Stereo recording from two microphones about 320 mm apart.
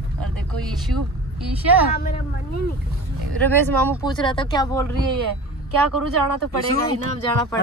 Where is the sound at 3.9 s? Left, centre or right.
Centre.